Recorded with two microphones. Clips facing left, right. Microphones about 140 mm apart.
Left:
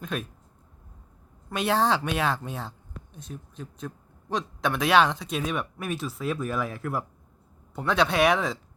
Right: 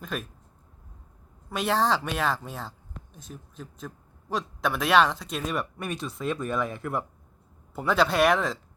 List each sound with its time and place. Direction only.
0.0 s speech: centre (ahead or behind)
1.5 s speech: centre (ahead or behind)